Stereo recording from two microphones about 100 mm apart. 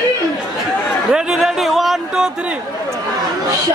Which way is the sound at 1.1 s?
5° right (ahead or behind).